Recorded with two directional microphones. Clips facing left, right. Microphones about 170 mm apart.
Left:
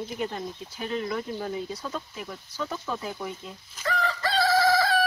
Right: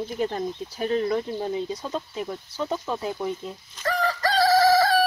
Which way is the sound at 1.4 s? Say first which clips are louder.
Right 4 dB; 25° right (ahead or behind).